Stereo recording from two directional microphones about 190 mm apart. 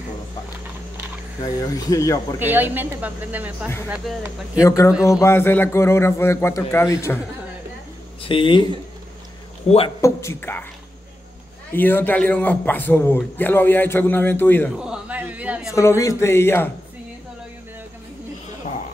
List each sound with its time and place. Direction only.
1.4 s speech: 20° left (ahead or behind)
2.3 s speech: 10° right (ahead or behind)
4.6 s a man's voice: 15° left (ahead or behind)
8.2 s speech: 25° left (ahead or behind)
9.7 s speech: 30° left (ahead or behind)
10.0 s a man's voice: 15° left (ahead or behind)
11.7 s a man's voice: 10° left (ahead or behind)
14.8 s a sound: 5° right (ahead or behind)
15.7 s a man's voice: 15° left (ahead or behind)